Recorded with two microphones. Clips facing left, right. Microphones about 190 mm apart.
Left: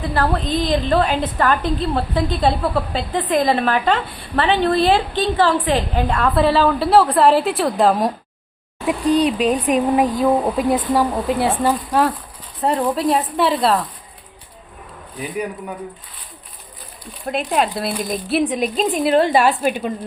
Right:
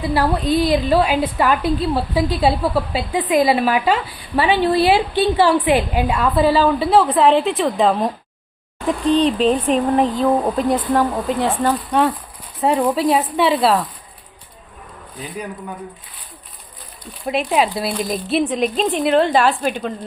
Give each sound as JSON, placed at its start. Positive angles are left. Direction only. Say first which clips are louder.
{"t": 0.1, "sound": "a woman's voice", "louder": "right 3 dB", "side_deg": -10}
{"t": 17.2, "sound": "speech", "louder": "right 2 dB", "side_deg": 0}